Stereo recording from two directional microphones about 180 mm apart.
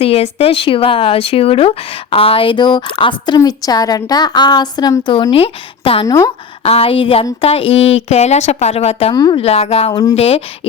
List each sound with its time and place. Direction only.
0.0 s a woman's voice: 35° left (ahead or behind)
9.1 s speech: 25° left (ahead or behind)
9.4 s a woman's voice: 35° left (ahead or behind)
9.9 s speech: 20° left (ahead or behind)
10.2 s a woman's voice: 35° left (ahead or behind)